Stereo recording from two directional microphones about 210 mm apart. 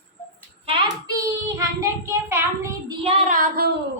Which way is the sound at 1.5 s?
15° right (ahead or behind).